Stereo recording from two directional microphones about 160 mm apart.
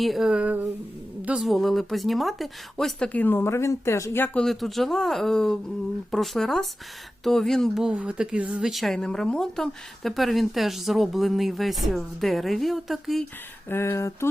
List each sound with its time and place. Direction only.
0.0 s speech: centre (ahead or behind)
4.4 s speech: centre (ahead or behind)
13.7 s speech: 15° left (ahead or behind)